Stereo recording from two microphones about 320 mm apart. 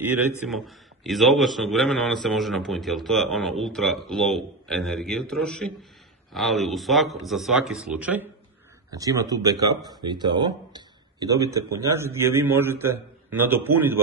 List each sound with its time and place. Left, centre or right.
0.5 s a man's voice: centre